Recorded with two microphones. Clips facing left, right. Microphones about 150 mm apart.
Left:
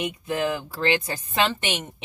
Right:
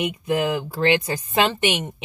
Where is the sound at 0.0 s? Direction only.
15° right (ahead or behind).